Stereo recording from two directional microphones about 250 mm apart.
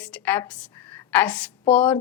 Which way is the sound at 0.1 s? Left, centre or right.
Centre.